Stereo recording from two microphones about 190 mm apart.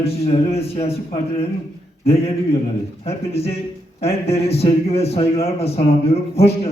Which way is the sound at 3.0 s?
30° left (ahead or behind).